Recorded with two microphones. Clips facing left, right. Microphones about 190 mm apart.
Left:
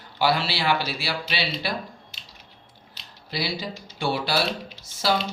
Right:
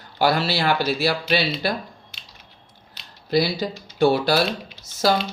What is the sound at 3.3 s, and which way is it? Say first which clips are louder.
Speech: right 9 dB; 45° right (ahead or behind).